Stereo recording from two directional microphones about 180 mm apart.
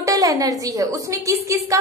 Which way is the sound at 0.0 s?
20° right (ahead or behind).